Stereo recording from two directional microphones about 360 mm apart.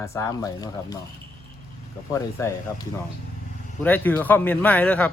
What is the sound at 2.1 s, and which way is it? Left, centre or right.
Speech, centre.